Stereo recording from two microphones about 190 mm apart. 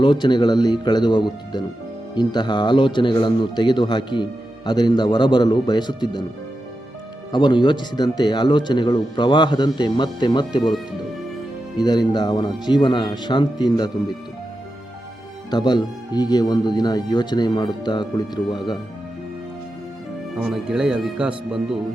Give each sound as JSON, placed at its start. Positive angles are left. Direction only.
{"t": 0.0, "sound": "a man's voice", "side_deg": 25}
{"t": 7.3, "sound": "a man's voice", "side_deg": 25}
{"t": 11.8, "sound": "a man's voice", "side_deg": 20}
{"t": 15.4, "sound": "a man's voice", "side_deg": 20}
{"t": 20.3, "sound": "speech", "side_deg": 0}